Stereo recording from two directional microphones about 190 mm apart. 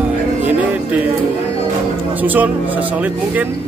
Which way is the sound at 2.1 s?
10° right (ahead or behind).